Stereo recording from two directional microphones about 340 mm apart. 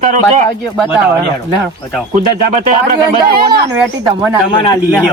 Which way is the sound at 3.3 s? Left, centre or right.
Right.